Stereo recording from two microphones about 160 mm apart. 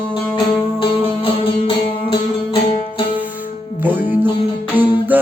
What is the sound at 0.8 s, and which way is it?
Music, 35° left (ahead or behind).